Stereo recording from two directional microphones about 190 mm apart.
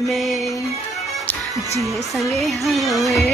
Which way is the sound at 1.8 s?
Centre (ahead or behind).